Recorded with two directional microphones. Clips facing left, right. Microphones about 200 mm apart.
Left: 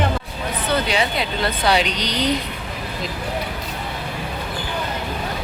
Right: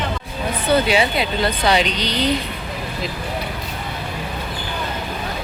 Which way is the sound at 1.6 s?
10° left (ahead or behind).